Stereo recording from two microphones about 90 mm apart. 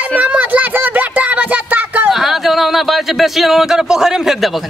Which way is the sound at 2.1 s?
5° right (ahead or behind).